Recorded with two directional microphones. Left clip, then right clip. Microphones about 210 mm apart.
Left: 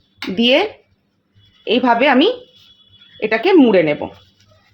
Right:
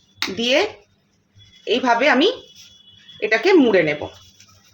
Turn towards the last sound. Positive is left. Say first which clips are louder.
# left 3 dB
turn(degrees=25)  # may be behind; listen again after turning